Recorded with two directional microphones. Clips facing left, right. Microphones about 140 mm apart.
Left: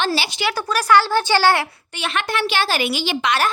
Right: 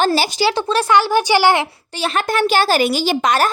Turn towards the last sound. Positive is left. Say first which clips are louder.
# right 4 dB
turn(degrees=-40)  # may be behind; listen again after turning